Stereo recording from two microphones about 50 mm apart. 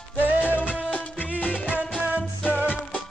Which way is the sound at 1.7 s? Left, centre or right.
Right.